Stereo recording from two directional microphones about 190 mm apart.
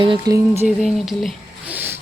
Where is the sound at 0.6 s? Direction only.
Centre (ahead or behind).